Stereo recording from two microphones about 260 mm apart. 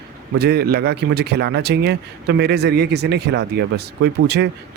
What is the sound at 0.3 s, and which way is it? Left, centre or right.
Speech, right.